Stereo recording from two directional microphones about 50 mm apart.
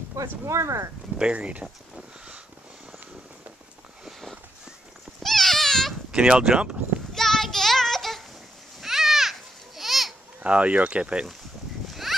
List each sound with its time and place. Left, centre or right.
0.1 s speech: right
1.1 s speech: centre
2.0 s a sound: right
5.2 s a sound: centre
6.1 s speech: centre
7.2 s child singing: centre
8.8 s children playing: centre
10.4 s speech: right
11.9 s a sound: centre